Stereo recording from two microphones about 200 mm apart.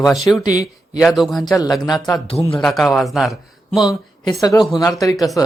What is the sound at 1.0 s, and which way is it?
Speech, centre (ahead or behind).